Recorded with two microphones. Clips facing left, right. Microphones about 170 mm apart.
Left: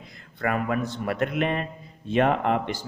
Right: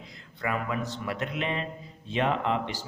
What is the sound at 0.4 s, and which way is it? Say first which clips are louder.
Speech: left 5 dB; 50° left (ahead or behind).